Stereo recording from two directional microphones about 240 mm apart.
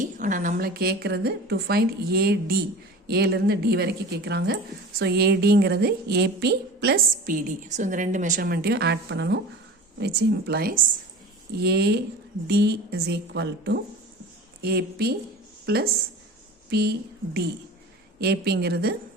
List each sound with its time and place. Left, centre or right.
0.0 s a woman's voice: right
18.2 s a woman's voice: right